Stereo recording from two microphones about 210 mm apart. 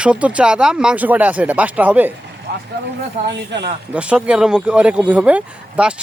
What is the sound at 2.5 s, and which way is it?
Speech, 50° right (ahead or behind).